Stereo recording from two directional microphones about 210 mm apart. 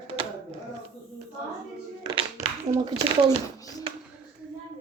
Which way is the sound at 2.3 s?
10° right (ahead or behind).